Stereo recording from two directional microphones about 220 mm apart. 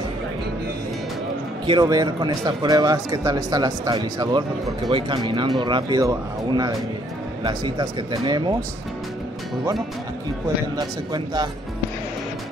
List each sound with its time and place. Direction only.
1.7 s a man's voice: 20° right (ahead or behind)